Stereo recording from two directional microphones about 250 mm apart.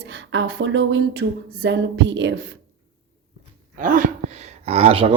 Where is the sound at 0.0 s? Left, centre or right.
Right.